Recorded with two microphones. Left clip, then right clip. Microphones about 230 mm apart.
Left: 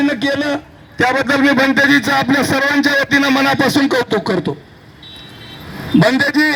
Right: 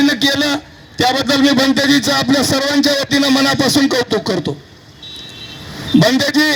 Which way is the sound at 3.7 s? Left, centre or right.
Right.